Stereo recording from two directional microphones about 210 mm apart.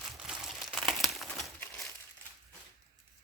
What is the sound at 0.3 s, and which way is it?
Crumpling, centre (ahead or behind).